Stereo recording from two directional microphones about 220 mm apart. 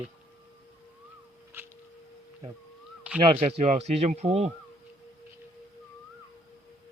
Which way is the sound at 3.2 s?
25° right (ahead or behind).